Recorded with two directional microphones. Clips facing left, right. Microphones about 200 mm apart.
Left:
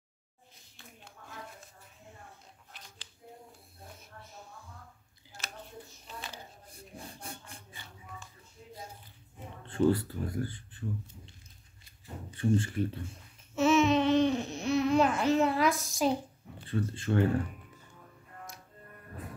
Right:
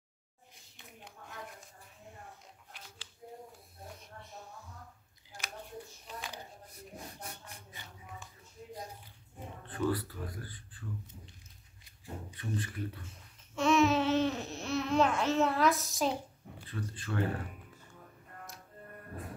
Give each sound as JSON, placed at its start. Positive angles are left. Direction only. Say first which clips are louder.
{"t": 6.7, "sound": "a sound", "louder": "left 3 dB", "side_deg": 30}
{"t": 9.7, "sound": "speech", "louder": "left 6 dB", "side_deg": 25}
{"t": 12.4, "sound": "speech", "louder": "left 11 dB", "side_deg": 30}
{"t": 13.6, "sound": "babbling", "louder": "left 2 dB", "side_deg": 0}
{"t": 16.6, "sound": "speech", "louder": "left 8 dB", "side_deg": 25}